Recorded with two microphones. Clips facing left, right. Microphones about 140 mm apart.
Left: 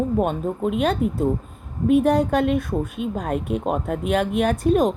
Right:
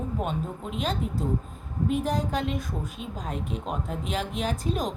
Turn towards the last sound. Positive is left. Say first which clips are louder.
# left 10 dB
turn(degrees=60)  # may be behind; listen again after turning